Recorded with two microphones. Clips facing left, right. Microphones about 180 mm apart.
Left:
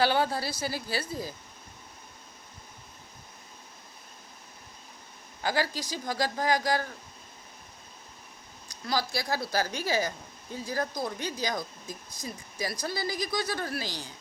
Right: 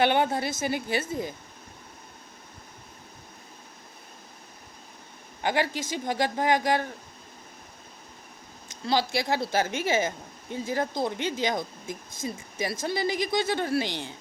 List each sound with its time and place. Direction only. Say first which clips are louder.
0.0 s speech: right 3 dB; 20° right (ahead or behind)
5.4 s speech: right 3 dB; 20° right (ahead or behind)
8.6 s speech: right 4 dB; 25° right (ahead or behind)